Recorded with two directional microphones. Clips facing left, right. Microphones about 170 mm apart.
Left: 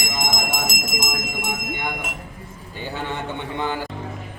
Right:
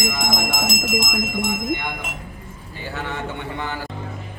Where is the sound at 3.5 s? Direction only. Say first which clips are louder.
Left 3 dB; 20° left (ahead or behind).